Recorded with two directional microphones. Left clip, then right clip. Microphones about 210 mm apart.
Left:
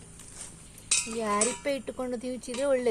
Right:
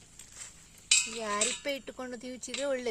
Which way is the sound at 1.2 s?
40° right (ahead or behind).